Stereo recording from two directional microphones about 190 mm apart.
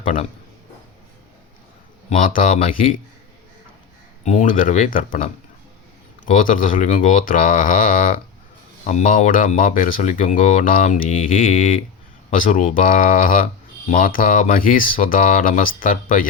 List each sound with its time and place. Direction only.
2.0 s speech: 45° left (ahead or behind)
4.2 s speech: 40° left (ahead or behind)